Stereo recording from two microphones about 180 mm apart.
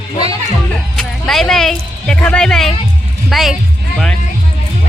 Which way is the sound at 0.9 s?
Centre (ahead or behind).